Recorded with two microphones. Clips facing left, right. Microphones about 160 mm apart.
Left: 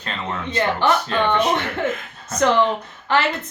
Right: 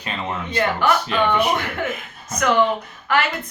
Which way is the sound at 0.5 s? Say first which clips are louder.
Even; 30° left (ahead or behind).